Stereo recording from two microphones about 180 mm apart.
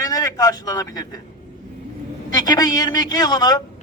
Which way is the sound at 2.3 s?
25° left (ahead or behind).